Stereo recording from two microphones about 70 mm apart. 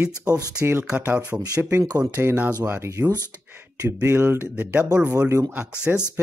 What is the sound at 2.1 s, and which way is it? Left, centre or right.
Speech, right.